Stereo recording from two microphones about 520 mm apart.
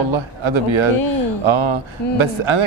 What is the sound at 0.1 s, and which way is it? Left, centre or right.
A man's voice, right.